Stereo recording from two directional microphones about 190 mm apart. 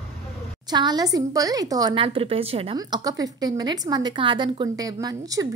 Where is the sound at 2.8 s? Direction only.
20° right (ahead or behind).